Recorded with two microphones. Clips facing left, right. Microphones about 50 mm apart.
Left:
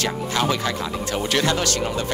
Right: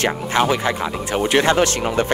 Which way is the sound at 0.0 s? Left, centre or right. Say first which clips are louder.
Right 4 dB; right.